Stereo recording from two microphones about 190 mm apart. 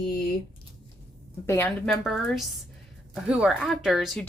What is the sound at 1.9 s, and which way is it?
Speech, centre (ahead or behind).